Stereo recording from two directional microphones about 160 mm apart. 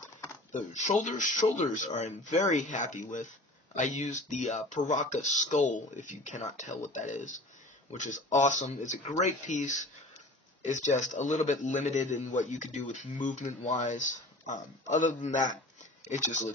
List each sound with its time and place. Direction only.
0.5 s a man's voice: 50° left (ahead or behind)